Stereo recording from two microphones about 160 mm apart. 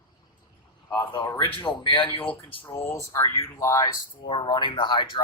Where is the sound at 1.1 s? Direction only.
30° left (ahead or behind).